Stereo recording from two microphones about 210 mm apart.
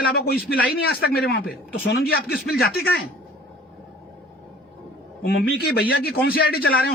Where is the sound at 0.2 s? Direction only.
45° left (ahead or behind).